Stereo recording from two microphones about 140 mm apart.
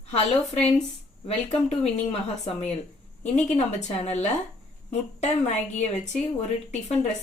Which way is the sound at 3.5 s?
50° left (ahead or behind).